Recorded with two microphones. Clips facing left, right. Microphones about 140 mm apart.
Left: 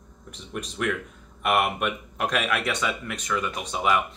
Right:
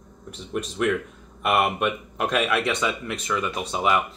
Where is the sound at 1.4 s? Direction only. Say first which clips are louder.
Right 2 dB; centre (ahead or behind).